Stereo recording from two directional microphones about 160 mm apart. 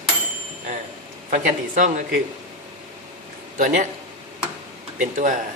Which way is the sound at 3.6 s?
55° right (ahead or behind).